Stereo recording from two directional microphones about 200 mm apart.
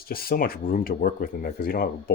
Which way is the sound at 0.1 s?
45° left (ahead or behind).